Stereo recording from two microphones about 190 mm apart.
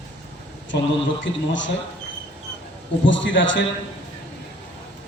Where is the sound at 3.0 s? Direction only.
75° left (ahead or behind).